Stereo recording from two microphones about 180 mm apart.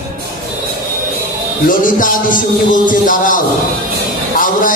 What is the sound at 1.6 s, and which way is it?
Music, 50° left (ahead or behind).